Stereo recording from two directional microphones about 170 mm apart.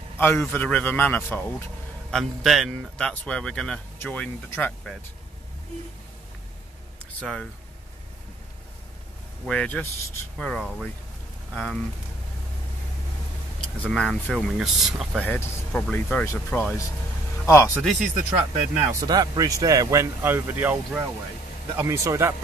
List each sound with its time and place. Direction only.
0.2 s a man's voice: 15° left (ahead or behind)
7.2 s speech: 5° left (ahead or behind)
9.5 s a man's voice: 10° left (ahead or behind)
13.6 s speech: 5° left (ahead or behind)
15.2 s a man's voice: 10° left (ahead or behind)
17.8 s speech: centre (ahead or behind)
18.9 s speech: 20° right (ahead or behind)